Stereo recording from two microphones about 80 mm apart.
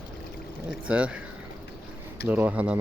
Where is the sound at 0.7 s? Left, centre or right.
Centre.